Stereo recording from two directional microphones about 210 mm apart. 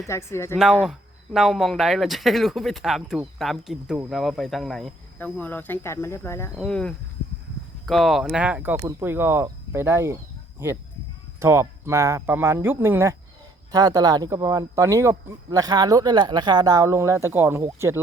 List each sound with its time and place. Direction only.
0.1 s a woman's voice: 15° left (ahead or behind)
0.6 s speech: 5° right (ahead or behind)
11.3 s speech: 10° right (ahead or behind)